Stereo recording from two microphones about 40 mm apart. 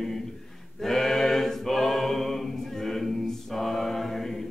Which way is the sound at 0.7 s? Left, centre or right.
Centre.